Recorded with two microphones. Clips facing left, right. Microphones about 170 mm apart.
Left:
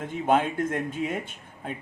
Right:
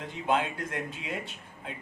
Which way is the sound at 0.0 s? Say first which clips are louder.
Left 5 dB; 50° left (ahead or behind).